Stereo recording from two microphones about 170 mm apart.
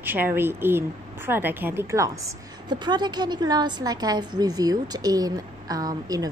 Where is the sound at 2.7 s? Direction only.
25° right (ahead or behind).